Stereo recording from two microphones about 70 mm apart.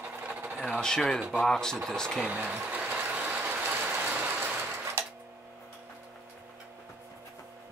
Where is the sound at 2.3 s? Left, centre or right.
Centre.